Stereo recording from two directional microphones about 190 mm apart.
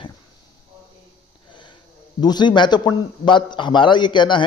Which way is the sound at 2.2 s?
20° left (ahead or behind).